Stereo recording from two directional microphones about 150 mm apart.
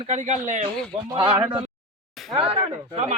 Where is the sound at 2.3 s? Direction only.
35° right (ahead or behind).